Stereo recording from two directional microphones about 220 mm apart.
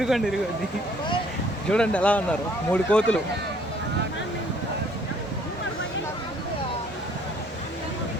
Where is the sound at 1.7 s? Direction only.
5° left (ahead or behind).